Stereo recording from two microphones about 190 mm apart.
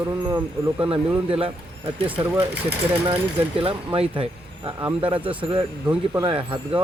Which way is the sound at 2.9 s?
30° right (ahead or behind).